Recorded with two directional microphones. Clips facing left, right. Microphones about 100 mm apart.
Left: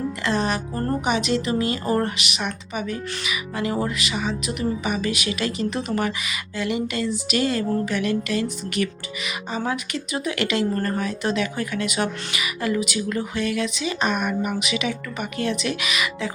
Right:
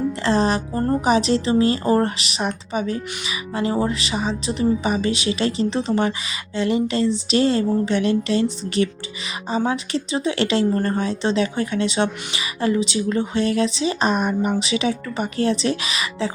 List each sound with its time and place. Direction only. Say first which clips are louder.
0.3 s speech: right 4 dB; 30° right (ahead or behind)